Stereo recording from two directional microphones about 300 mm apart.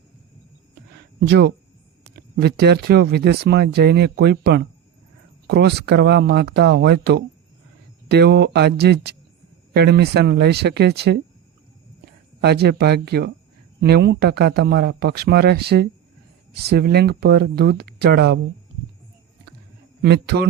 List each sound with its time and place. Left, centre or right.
1.3 s speech: right
12.4 s speech: right
20.0 s speech: right